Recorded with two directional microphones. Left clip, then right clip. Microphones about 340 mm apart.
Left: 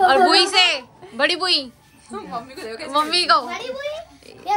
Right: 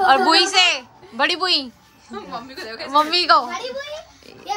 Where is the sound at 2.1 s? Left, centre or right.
Centre.